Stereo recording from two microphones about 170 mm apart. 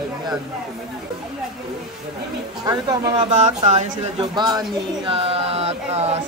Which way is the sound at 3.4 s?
45° right (ahead or behind).